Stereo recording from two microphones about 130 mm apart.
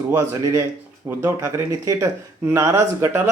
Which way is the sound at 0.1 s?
20° right (ahead or behind).